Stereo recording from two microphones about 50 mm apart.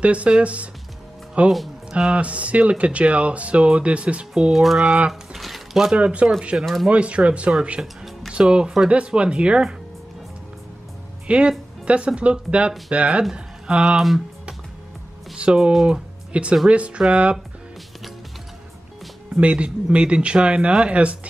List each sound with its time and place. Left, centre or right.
0.0 s speech: right
4.3 s speech: centre
5.3 s a sound: centre
5.9 s speech: right
6.6 s speech: centre
6.9 s speech: right
11.2 s speech: right
13.7 s speech: centre
15.3 s speech: right
15.9 s music: right
16.6 s speech: right
19.4 s speech: right